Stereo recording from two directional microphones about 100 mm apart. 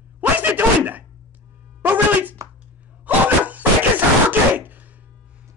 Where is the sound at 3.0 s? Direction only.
15° right (ahead or behind).